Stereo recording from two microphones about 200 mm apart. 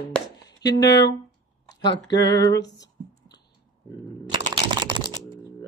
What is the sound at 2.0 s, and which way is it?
Female singing, 20° left (ahead or behind).